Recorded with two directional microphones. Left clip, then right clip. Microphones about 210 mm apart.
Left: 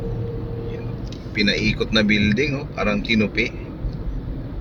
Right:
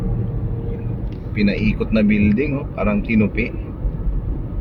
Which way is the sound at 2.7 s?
30° left (ahead or behind).